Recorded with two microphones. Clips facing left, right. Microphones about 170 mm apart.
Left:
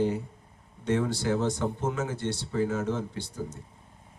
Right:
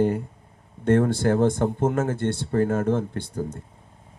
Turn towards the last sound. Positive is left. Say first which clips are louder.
# right 6 dB
turn(degrees=-55)  # may be behind; listen again after turning